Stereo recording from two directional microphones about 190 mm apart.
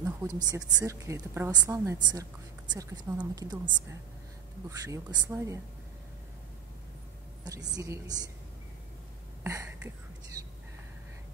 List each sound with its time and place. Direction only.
0.0 s a woman's voice: 15° right (ahead or behind)
7.4 s a woman's voice: 20° right (ahead or behind)
9.4 s a sound: 15° right (ahead or behind)